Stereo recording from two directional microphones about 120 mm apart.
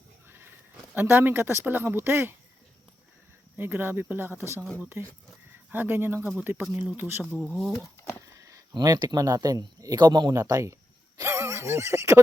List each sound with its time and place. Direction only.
0.3 s goat: 15° right (ahead or behind)
0.9 s speech: 15° right (ahead or behind)
3.6 s speech: 20° right (ahead or behind)
8.4 s speech: 25° right (ahead or behind)
11.2 s neigh: 20° right (ahead or behind)